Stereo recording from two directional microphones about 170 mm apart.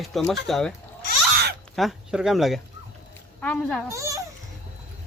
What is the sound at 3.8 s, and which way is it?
Speech, 20° right (ahead or behind).